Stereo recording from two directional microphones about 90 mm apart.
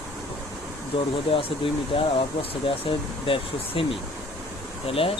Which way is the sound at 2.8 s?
85° left.